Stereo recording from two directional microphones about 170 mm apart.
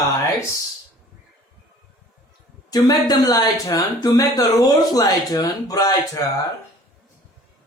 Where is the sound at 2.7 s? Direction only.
25° left (ahead or behind).